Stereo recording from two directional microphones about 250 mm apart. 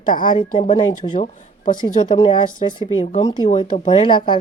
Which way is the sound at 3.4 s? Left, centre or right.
Left.